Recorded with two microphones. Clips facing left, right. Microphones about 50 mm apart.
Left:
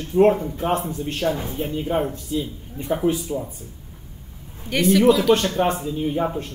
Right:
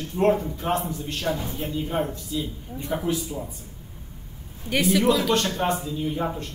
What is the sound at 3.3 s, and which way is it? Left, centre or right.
Speech, centre.